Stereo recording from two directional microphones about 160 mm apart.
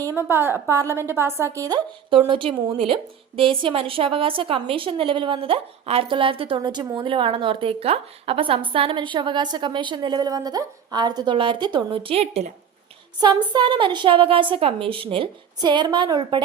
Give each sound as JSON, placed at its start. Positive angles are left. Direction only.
{"t": 0.0, "sound": "a woman's voice", "side_deg": -15}
{"t": 13.1, "sound": "a woman's voice", "side_deg": -25}